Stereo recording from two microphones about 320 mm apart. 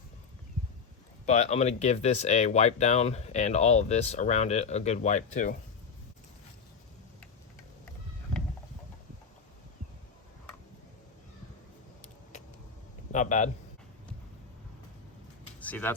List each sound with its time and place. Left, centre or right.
1.2 s speech: left
13.1 s speech: left
15.6 s speech: centre